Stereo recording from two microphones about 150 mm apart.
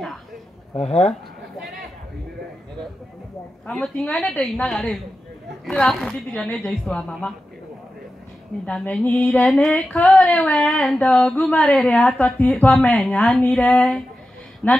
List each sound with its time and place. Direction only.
0.7 s speech: 50° left (ahead or behind)
3.6 s female singing: 5° left (ahead or behind)
8.6 s female singing: 5° left (ahead or behind)
14.6 s speech: 10° left (ahead or behind)